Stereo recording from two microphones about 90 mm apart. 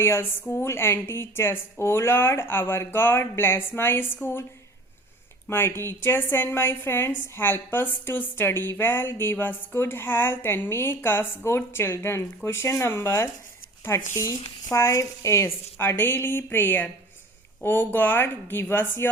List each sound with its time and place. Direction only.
0.0 s a woman's voice: 25° left (ahead or behind)
5.5 s a woman's voice: 25° left (ahead or behind)